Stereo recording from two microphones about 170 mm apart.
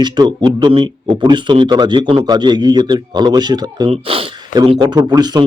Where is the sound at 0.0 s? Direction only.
25° right (ahead or behind).